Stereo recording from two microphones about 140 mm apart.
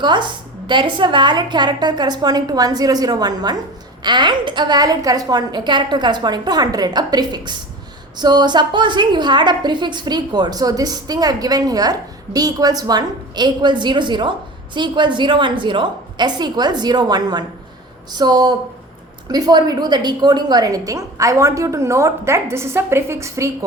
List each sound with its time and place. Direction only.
0.0 s a woman's voice: 35° right (ahead or behind)